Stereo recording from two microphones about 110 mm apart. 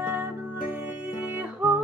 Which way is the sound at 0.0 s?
15° right (ahead or behind).